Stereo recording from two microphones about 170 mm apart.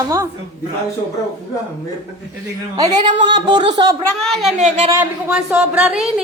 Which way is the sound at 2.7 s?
25° right (ahead or behind).